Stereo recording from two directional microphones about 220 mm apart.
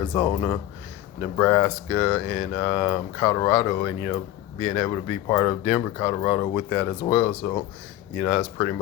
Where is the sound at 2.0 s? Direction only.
20° left (ahead or behind).